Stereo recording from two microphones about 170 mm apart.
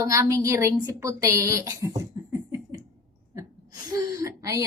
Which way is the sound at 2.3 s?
20° right (ahead or behind).